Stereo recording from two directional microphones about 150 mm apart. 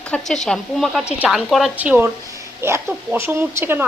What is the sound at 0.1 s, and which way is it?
A woman's voice, 5° left (ahead or behind).